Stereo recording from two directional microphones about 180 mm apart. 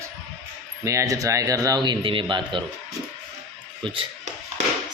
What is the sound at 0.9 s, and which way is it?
Speech, 15° right (ahead or behind).